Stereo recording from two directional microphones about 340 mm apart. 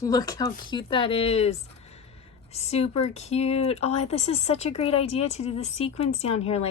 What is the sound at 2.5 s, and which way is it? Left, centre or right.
Speech, centre.